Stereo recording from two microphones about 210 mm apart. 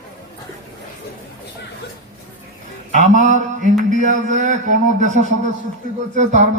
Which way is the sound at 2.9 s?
35° right (ahead or behind).